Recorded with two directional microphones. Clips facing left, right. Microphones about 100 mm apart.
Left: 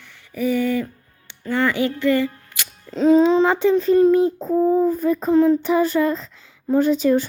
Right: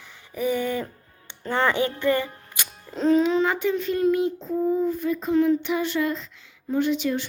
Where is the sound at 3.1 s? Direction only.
30° left (ahead or behind).